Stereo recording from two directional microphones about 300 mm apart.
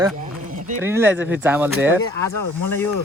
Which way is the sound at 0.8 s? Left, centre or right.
Centre.